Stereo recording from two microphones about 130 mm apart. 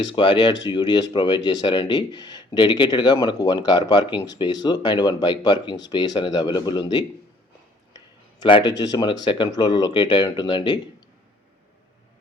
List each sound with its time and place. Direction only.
0.0 s speech: 40° left (ahead or behind)
8.4 s speech: 35° left (ahead or behind)